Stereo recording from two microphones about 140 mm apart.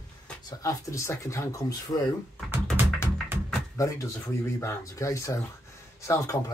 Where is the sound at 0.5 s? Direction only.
25° left (ahead or behind).